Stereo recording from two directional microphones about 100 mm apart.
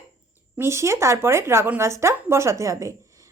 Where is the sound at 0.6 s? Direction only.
30° right (ahead or behind).